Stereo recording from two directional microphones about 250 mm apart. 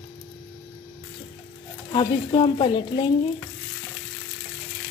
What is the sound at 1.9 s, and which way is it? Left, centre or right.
Frying, centre.